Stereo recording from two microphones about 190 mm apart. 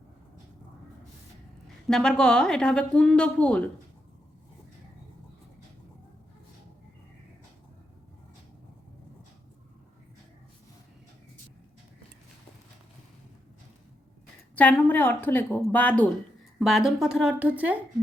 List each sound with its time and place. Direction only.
1.6 s a woman's voice: 5° left (ahead or behind)
14.5 s a woman's voice: 10° left (ahead or behind); by 17.7 s 10° right (ahead or behind)